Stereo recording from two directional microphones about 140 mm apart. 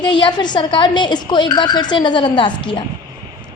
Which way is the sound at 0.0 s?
30° left (ahead or behind).